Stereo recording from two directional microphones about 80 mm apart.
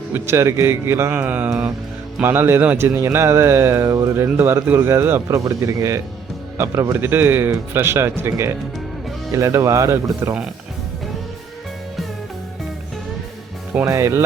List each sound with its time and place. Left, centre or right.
0.1 s speech: right
1.2 s a man's voice: centre; by 4.3 s right
4.4 s a man's voice: right
5.5 s speech: right
7.0 s speech: right
13.7 s a man's voice: centre